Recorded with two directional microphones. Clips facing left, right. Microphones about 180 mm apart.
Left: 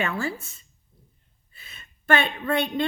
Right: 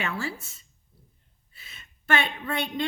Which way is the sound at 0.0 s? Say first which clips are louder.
Left 4 dB; 55° left (ahead or behind).